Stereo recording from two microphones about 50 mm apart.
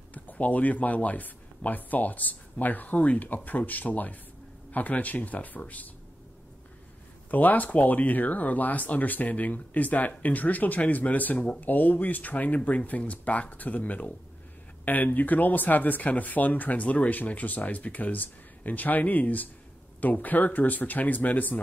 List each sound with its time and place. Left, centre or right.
0.1 s speech: left
7.2 s speech: left